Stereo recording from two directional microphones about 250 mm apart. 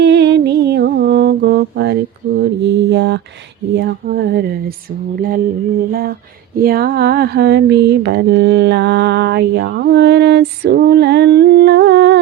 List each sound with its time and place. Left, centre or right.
0.0 s mantra: right